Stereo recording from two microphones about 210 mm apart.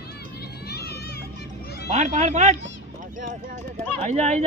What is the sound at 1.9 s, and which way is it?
Speech, 35° right (ahead or behind).